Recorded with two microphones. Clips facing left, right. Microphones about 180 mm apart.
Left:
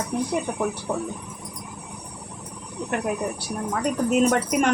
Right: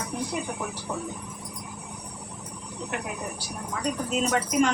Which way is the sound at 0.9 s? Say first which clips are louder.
Left 2 dB; 60° left (ahead or behind).